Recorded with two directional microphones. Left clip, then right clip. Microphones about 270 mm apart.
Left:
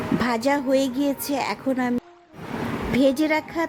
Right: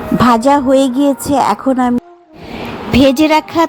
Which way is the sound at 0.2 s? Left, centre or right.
Centre.